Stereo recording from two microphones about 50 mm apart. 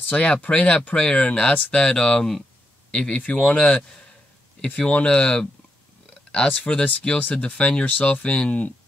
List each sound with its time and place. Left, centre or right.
0.1 s speech: left
6.5 s speech: left